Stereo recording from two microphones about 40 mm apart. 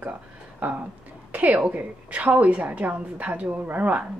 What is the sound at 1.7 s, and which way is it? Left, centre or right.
A woman's voice, right.